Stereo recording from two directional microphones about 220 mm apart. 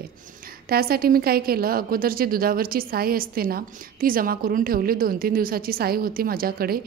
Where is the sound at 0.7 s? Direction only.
45° right (ahead or behind).